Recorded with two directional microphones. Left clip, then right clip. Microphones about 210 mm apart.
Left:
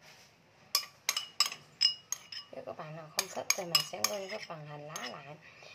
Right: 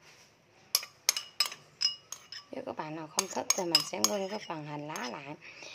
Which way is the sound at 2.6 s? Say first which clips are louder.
Right 8 dB; 55° right (ahead or behind).